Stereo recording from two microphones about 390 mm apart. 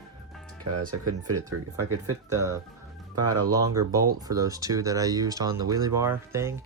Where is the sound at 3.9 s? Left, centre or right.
Centre.